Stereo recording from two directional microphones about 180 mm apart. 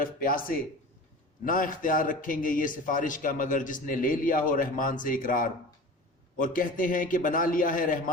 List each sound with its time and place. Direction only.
0.0 s a man's voice: 50° left (ahead or behind)